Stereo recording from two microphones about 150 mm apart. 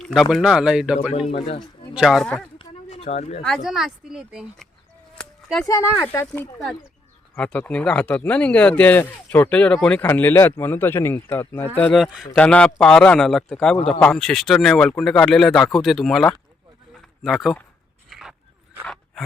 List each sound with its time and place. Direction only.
0.0 s speech: centre (ahead or behind)
1.3 s speech: 40° left (ahead or behind)
1.9 s speech: centre (ahead or behind)
2.6 s a sound: 40° left (ahead or behind)
3.4 s speech: centre (ahead or behind)
5.1 s a sound: 5° left (ahead or behind)
5.6 s speech: 15° left (ahead or behind)
11.9 s speech: centre (ahead or behind)
18.1 s dog: centre (ahead or behind)